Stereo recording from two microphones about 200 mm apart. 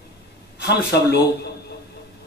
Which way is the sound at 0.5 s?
55° left (ahead or behind).